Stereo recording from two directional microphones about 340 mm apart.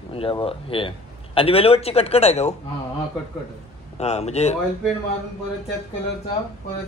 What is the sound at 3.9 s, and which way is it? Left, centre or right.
Speech, centre.